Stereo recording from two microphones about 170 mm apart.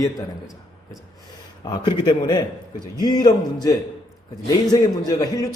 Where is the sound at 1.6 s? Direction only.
25° left (ahead or behind).